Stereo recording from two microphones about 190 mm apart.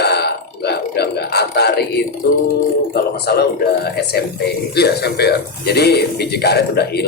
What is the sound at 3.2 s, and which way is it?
A man's voice, 55° left (ahead or behind).